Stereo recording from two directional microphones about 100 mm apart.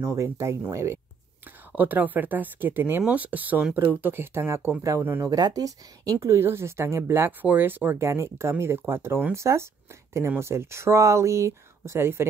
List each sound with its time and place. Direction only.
0.0 s speech: 30° right (ahead or behind)
1.7 s speech: 15° right (ahead or behind)
5.3 s speech: 40° right (ahead or behind)
6.1 s speech: 25° right (ahead or behind)